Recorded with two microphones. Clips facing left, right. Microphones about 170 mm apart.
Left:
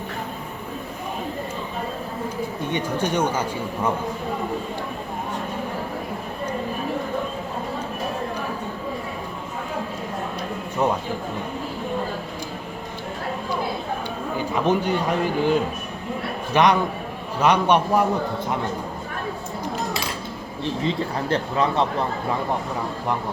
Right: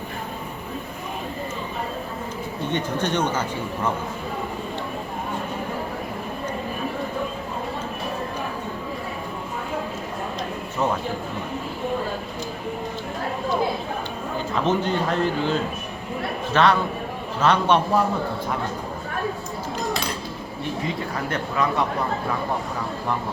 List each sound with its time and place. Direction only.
2.7 s speech: 10° left (ahead or behind)
14.3 s a man's voice: 10° left (ahead or behind)
20.8 s speech: 30° left (ahead or behind)